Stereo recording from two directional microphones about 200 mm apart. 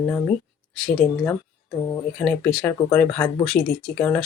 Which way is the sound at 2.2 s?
5° left (ahead or behind).